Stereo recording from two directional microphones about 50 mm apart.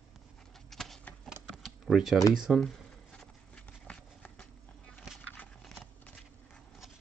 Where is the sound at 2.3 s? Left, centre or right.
Centre.